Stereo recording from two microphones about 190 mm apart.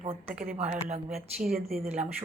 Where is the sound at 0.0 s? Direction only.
35° right (ahead or behind).